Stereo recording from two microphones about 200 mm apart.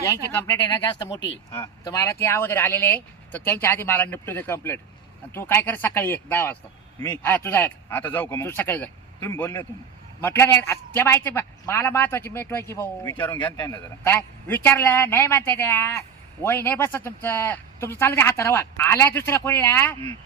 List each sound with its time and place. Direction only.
0.3 s a man's voice: 10° left (ahead or behind)
0.7 s a man's voice: 20° left (ahead or behind)